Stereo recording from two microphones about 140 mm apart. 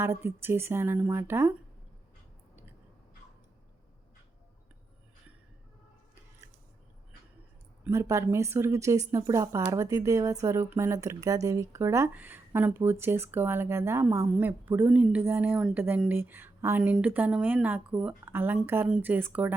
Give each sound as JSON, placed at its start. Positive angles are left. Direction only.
{"t": 0.0, "sound": "a woman's voice", "side_deg": -15}
{"t": 7.9, "sound": "a woman's voice", "side_deg": -20}